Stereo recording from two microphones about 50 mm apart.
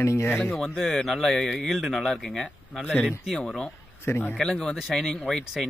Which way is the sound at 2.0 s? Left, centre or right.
Centre.